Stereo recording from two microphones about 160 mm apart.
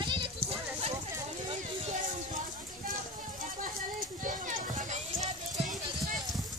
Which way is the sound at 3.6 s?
60° right (ahead or behind).